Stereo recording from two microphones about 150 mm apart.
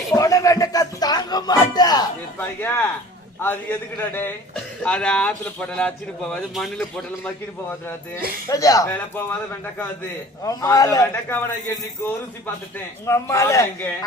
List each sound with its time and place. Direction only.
0.1 s a sound: 20° left (ahead or behind)
2.4 s a man's voice: 15° left (ahead or behind)
8.4 s a man's voice: 25° left (ahead or behind)
10.4 s a man's voice: 20° left (ahead or behind)
13.1 s a man's voice: 20° left (ahead or behind)